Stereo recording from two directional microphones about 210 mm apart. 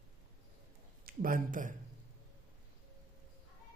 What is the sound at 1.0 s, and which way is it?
Speech, 40° right (ahead or behind).